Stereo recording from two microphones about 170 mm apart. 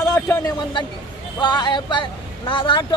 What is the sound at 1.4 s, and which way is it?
Speech, 25° left (ahead or behind).